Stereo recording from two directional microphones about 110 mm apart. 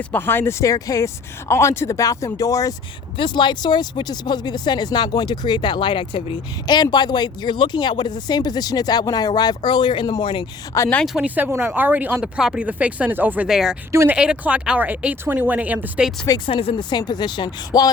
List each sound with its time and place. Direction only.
0.1 s speech: 20° left (ahead or behind)
3.2 s speech: 45° left (ahead or behind)
11.0 s speech: 5° right (ahead or behind)
11.5 s speech: 15° right (ahead or behind)
13.5 s speech: 5° right (ahead or behind)
16.5 s speech: 55° left (ahead or behind); by 17.9 s 35° left (ahead or behind)